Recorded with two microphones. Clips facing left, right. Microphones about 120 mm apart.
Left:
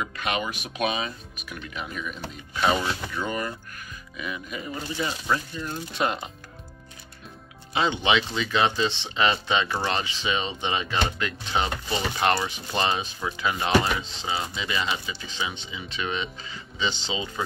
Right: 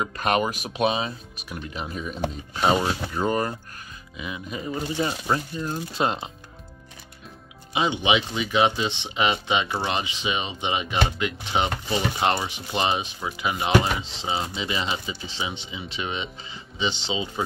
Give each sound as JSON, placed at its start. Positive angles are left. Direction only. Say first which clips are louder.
{"t": 0.0, "sound": "speech", "louder": "right 5 dB", "side_deg": -40}
{"t": 4.2, "sound": "speech", "louder": "right 1 dB", "side_deg": -25}
{"t": 4.9, "sound": "speech", "louder": "right 1 dB", "side_deg": -35}
{"t": 7.7, "sound": "speech", "louder": "right 1 dB", "side_deg": -15}